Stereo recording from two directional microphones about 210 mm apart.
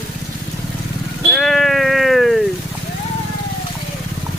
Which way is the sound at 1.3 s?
Centre (ahead or behind).